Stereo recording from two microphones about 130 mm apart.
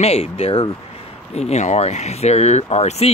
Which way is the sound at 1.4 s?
60° left (ahead or behind).